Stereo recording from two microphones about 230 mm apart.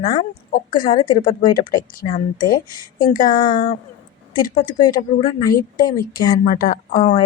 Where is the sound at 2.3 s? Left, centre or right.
Left.